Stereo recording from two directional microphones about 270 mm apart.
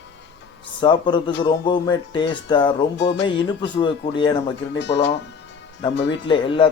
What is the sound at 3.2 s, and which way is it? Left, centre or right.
Speech, centre.